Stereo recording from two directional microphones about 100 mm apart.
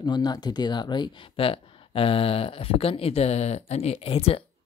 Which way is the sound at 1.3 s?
65° left (ahead or behind).